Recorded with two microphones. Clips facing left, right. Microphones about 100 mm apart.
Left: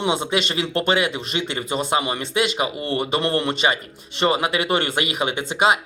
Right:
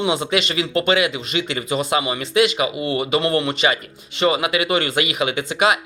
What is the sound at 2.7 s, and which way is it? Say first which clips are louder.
Speech: right 3 dB; 10° right (ahead or behind).